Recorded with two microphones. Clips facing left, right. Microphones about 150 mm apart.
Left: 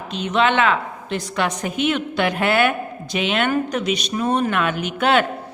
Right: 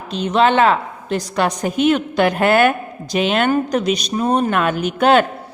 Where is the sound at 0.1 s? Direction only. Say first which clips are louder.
Right 4 dB; 35° right (ahead or behind).